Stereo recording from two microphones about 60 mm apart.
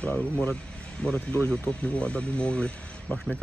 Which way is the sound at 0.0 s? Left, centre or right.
Left.